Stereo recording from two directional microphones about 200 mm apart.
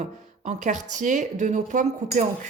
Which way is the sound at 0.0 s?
35° right (ahead or behind).